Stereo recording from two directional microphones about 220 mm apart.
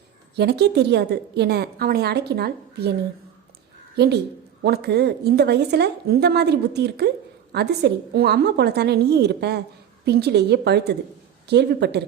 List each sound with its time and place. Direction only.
0.3 s a woman's voice: 50° right (ahead or behind)
3.9 s a woman's voice: 50° right (ahead or behind)